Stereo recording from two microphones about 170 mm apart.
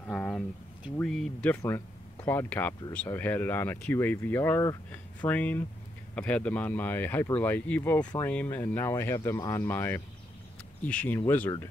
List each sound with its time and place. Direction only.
0.0 s speech: 5° left (ahead or behind)